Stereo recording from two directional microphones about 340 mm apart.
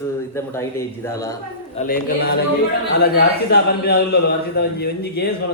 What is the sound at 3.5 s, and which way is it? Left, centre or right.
A man's voice, left.